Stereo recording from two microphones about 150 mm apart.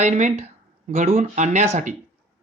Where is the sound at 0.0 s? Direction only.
50° right (ahead or behind).